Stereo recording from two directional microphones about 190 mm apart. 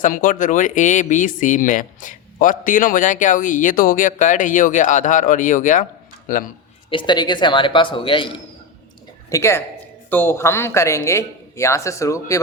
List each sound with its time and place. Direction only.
0.0 s speech: 45° left (ahead or behind)
6.9 s speech: 25° left (ahead or behind)
9.3 s speech: 15° left (ahead or behind)